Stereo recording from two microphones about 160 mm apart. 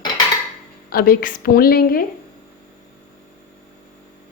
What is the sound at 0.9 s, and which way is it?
A woman's voice, 65° left (ahead or behind).